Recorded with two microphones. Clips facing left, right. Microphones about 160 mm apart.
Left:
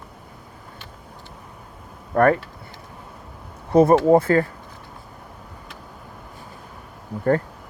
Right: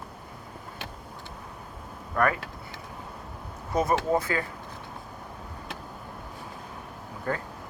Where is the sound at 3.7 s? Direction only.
30° left (ahead or behind).